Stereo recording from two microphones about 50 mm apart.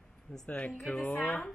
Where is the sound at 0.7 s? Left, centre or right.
Centre.